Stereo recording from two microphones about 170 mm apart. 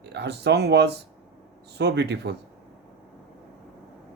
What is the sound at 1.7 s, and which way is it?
Speech, 80° right.